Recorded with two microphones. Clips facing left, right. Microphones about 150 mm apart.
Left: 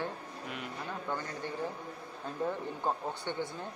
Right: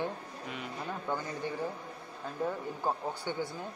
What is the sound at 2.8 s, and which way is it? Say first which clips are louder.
Speech: right 1 dB; 10° right (ahead or behind).